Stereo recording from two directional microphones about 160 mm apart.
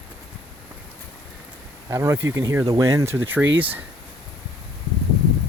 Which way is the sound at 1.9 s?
20° right (ahead or behind).